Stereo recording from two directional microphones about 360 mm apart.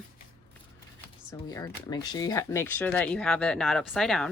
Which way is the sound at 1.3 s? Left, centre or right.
Centre.